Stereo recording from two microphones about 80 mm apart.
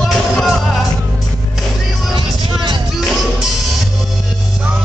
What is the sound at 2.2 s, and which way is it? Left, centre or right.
Music, right.